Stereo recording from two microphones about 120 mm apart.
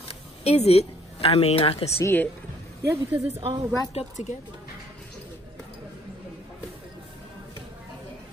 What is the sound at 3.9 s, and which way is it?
Speech, 75° left (ahead or behind).